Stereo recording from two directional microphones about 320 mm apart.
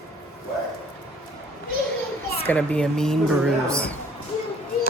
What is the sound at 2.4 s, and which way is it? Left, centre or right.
A woman's voice, centre.